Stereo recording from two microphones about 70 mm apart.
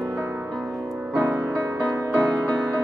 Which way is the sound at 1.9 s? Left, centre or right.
Right.